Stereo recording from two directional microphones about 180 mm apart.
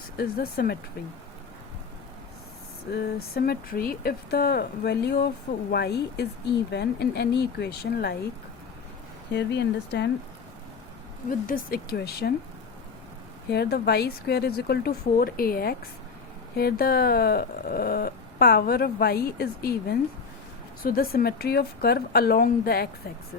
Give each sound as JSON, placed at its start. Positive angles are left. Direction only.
{"t": 0.2, "sound": "speech", "side_deg": 60}
{"t": 2.9, "sound": "speech", "side_deg": 60}
{"t": 9.3, "sound": "speech", "side_deg": 70}
{"t": 11.3, "sound": "speech", "side_deg": 50}
{"t": 13.5, "sound": "speech", "side_deg": 65}